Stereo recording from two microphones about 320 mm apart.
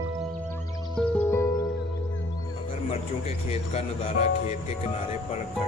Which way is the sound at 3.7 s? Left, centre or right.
Centre.